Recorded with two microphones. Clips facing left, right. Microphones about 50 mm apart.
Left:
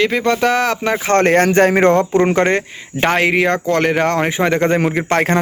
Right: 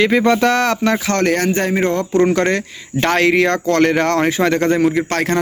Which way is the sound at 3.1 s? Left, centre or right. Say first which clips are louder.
Right 1 dB; centre.